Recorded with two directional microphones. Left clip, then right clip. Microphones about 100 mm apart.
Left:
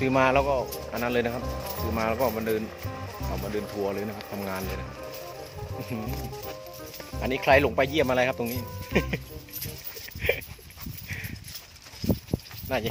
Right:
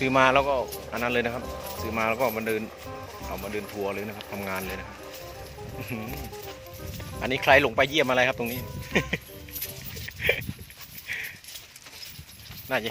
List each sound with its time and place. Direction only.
0.0 s speech: 5° left (ahead or behind)
1.1 s speech: 15° left (ahead or behind)
1.4 s speech: centre (ahead or behind)
1.8 s speech: 15° left (ahead or behind)
3.5 s speech: 30° left (ahead or behind)
4.2 s speech: 20° left (ahead or behind)
5.9 s speech: 5° left (ahead or behind)
7.2 s speech: 5° left (ahead or behind)
10.2 s a sound: 5° left (ahead or behind)